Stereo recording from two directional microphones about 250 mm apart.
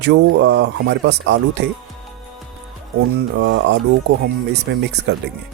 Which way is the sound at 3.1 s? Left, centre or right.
Right.